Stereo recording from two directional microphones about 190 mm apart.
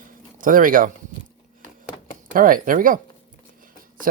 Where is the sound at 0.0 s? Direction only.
45° right (ahead or behind).